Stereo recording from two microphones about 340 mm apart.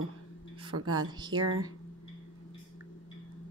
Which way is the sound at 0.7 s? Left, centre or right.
Right.